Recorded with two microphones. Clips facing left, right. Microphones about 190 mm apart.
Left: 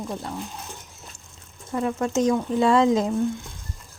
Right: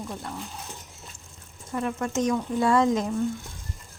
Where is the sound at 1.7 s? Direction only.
25° left (ahead or behind).